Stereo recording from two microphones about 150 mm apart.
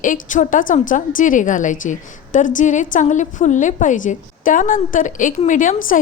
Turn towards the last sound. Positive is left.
turn(degrees=60)  # may be behind; listen again after turning